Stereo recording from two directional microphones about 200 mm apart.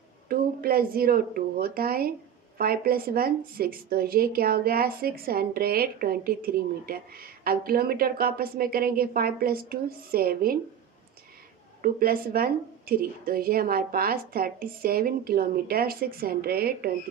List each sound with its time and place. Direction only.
0.3 s speech: 45° right (ahead or behind)
11.8 s speech: 45° right (ahead or behind)